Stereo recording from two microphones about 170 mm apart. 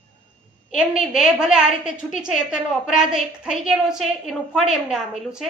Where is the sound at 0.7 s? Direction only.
5° right (ahead or behind).